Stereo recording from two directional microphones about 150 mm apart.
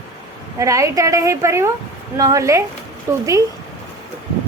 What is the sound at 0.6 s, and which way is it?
A woman's voice, 20° right (ahead or behind).